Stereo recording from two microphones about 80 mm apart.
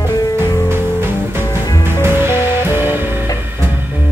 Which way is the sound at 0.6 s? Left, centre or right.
Right.